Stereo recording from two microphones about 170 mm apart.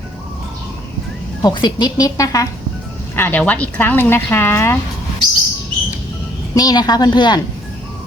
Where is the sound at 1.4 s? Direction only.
25° left (ahead or behind).